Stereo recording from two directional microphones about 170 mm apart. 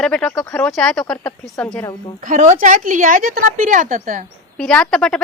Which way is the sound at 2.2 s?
45° right (ahead or behind).